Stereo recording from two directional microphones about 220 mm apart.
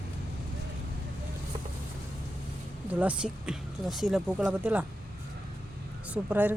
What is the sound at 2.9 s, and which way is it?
Speech, 5° right (ahead or behind).